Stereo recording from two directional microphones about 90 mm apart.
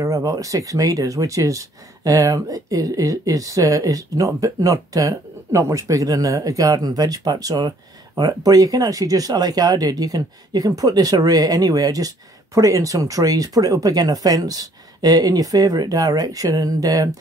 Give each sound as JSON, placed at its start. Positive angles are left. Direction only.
{"t": 0.0, "sound": "speech", "side_deg": -40}